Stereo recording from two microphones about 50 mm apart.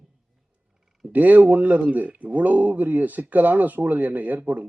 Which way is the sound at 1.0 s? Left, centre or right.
Right.